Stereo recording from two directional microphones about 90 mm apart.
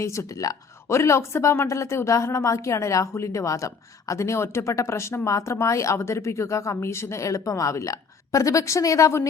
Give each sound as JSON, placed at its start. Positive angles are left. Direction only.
{"t": 0.0, "sound": "speech", "side_deg": 35}